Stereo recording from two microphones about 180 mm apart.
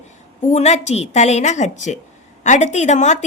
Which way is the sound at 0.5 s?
40° left (ahead or behind).